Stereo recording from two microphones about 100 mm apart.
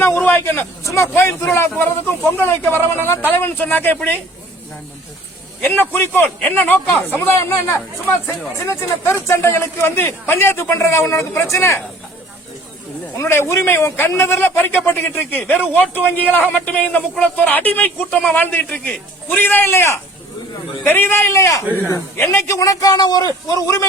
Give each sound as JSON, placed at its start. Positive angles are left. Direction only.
{"t": 0.0, "sound": "a man's voice", "side_deg": 20}
{"t": 5.6, "sound": "speech", "side_deg": 20}
{"t": 13.1, "sound": "a man's voice", "side_deg": 25}